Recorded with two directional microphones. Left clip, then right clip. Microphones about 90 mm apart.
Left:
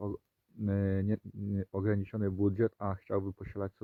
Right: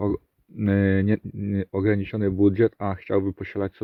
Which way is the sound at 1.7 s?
70° left (ahead or behind).